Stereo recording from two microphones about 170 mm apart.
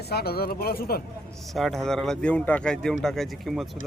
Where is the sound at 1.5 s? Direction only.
Centre (ahead or behind).